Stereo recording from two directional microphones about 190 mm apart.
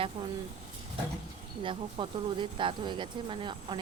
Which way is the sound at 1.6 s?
25° right (ahead or behind).